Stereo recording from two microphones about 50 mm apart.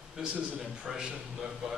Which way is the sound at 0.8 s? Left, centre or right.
Centre.